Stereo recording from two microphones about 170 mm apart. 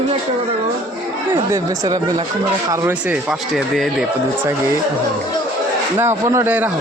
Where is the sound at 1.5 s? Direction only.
20° right (ahead or behind).